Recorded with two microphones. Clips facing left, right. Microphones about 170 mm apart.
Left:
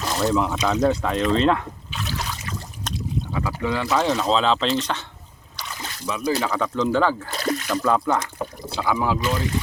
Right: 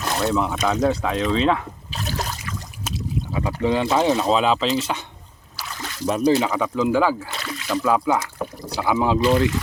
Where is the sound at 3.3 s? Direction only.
25° right (ahead or behind); by 5.0 s 5° right (ahead or behind).